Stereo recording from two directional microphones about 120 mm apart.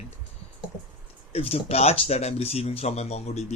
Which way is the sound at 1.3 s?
60° left (ahead or behind).